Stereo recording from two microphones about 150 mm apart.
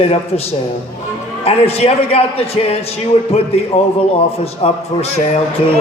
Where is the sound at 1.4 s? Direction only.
45° left (ahead or behind).